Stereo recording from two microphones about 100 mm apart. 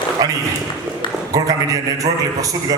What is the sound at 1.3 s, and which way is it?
A man's voice, 35° right (ahead or behind).